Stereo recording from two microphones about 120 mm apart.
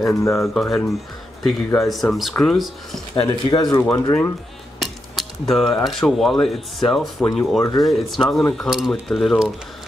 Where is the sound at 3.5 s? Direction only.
40° left (ahead or behind).